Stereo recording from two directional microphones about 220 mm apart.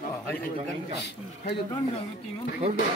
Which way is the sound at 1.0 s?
50° left (ahead or behind).